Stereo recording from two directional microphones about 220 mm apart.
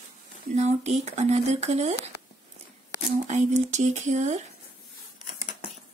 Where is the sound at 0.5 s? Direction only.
30° right (ahead or behind).